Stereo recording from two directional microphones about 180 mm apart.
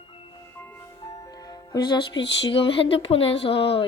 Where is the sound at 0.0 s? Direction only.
30° left (ahead or behind).